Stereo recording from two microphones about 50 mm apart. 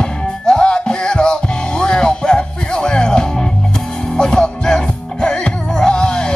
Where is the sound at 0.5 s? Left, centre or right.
Centre.